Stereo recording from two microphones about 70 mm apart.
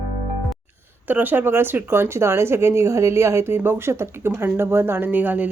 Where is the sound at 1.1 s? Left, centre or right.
Right.